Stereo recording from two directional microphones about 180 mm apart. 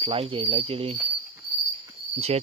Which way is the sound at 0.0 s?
30° right (ahead or behind).